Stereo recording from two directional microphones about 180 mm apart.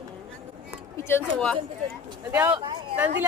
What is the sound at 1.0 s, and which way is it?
Speech, 10° left (ahead or behind).